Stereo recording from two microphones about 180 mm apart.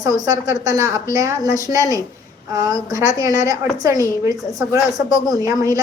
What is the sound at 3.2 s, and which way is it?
A woman's voice, 20° right (ahead or behind).